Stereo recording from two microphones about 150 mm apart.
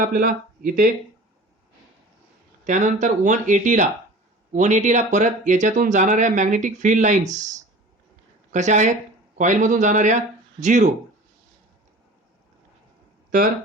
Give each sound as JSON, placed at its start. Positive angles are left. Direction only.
{"t": 0.0, "sound": "speech", "side_deg": -70}
{"t": 2.6, "sound": "speech", "side_deg": -55}
{"t": 8.5, "sound": "speech", "side_deg": -55}